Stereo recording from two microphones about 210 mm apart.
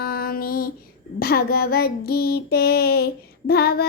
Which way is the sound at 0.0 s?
45° left (ahead or behind).